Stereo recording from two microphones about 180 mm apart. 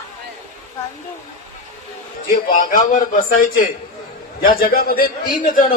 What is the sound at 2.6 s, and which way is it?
A man's voice, 50° left (ahead or behind).